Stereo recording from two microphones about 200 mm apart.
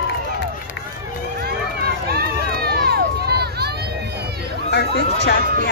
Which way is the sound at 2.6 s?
50° right (ahead or behind).